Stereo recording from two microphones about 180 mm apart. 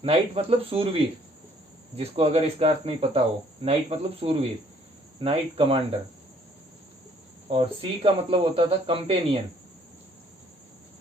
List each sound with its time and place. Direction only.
0.0 s speech: 30° right (ahead or behind)
7.5 s speech: 30° right (ahead or behind)